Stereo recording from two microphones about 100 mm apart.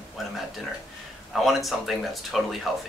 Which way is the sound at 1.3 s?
Centre (ahead or behind).